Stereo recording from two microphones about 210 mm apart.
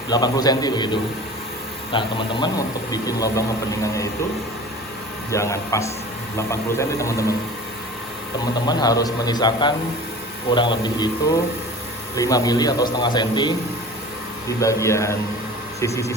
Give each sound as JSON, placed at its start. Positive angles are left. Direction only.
{"t": 0.1, "sound": "speech", "side_deg": 20}
{"t": 1.9, "sound": "speech", "side_deg": 25}
{"t": 5.3, "sound": "speech", "side_deg": 15}
{"t": 8.6, "sound": "speech", "side_deg": 20}